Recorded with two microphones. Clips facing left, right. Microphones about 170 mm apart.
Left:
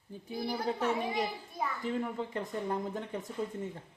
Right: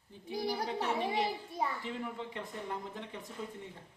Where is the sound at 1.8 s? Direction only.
45° left (ahead or behind).